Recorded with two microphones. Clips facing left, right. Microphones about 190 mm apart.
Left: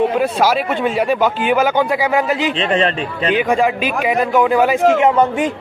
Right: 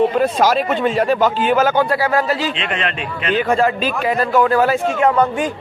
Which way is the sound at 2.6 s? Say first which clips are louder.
Left 7 dB; 35° left (ahead or behind).